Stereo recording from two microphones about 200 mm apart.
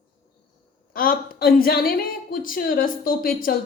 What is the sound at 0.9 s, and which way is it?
A woman's voice, 45° left (ahead or behind).